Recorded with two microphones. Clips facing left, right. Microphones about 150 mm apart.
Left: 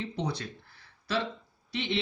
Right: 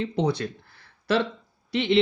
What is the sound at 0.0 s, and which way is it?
Speech, 70° right (ahead or behind).